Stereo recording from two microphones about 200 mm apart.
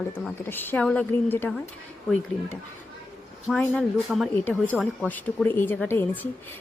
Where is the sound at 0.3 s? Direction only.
10° left (ahead or behind).